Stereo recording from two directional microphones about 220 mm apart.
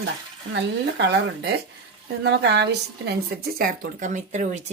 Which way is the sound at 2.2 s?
50° right (ahead or behind).